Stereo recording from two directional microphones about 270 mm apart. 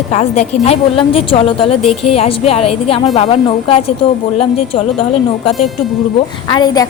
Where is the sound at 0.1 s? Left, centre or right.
Left.